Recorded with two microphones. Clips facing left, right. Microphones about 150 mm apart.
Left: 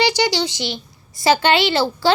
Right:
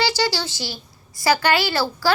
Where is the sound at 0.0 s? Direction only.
20° left (ahead or behind).